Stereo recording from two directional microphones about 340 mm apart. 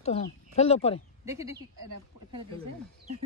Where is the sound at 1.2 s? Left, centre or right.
Centre.